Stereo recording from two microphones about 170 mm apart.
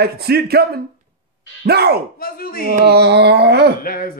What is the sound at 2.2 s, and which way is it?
Speech, 60° left (ahead or behind).